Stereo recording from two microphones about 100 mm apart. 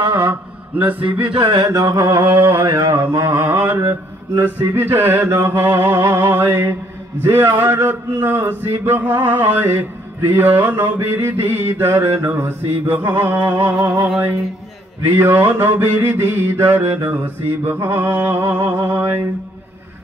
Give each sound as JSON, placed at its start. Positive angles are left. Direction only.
{"t": 0.0, "sound": "mantra", "side_deg": -45}
{"t": 0.3, "sound": "mantra", "side_deg": -20}
{"t": 1.3, "sound": "a sound", "side_deg": -40}
{"t": 2.2, "sound": "a man's voice", "side_deg": -20}